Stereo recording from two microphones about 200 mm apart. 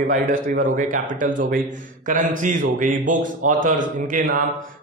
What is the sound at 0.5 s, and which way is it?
A man's voice, 40° right (ahead or behind).